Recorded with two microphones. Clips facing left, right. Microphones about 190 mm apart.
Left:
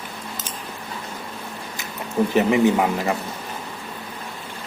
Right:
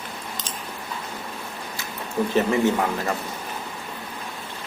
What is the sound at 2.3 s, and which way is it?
Speech, 15° left (ahead or behind).